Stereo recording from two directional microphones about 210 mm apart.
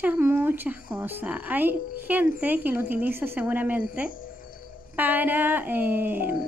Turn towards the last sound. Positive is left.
turn(degrees=-10)  # may be behind; listen again after turning